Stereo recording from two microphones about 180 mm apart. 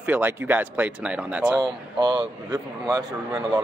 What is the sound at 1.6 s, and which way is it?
Speech, 25° right (ahead or behind).